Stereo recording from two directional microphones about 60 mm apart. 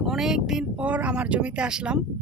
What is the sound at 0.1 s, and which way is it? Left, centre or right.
Speech, centre.